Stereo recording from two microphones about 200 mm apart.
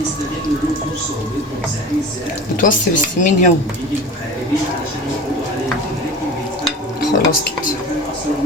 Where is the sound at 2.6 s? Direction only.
40° left (ahead or behind).